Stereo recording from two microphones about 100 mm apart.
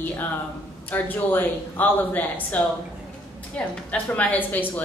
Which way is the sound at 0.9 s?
20° left (ahead or behind).